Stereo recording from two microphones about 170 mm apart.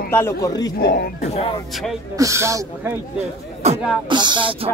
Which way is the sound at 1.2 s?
35° left (ahead or behind).